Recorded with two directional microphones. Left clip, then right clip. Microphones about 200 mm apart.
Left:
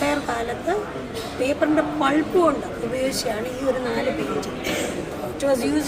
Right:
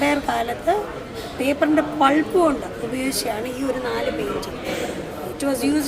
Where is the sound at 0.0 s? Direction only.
35° right (ahead or behind).